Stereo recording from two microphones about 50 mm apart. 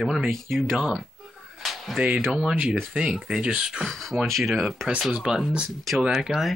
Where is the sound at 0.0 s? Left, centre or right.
Centre.